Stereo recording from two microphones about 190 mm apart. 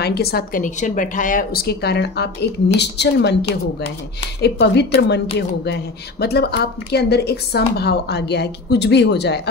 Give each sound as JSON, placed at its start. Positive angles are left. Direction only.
{"t": 0.0, "sound": "a woman's voice", "side_deg": 55}
{"t": 4.4, "sound": "a woman's voice", "side_deg": 60}